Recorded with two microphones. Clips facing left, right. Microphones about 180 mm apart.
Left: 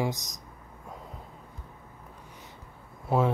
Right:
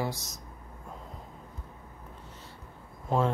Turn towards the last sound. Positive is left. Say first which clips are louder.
# left 2 dB
turn(degrees=10)  # may be behind; listen again after turning